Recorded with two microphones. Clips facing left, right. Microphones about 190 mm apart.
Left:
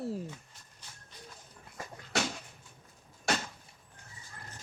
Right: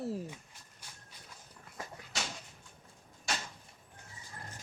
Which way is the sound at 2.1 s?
60° left (ahead or behind).